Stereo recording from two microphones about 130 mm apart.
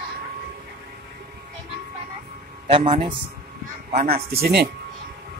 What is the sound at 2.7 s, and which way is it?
Speech, 45° right (ahead or behind).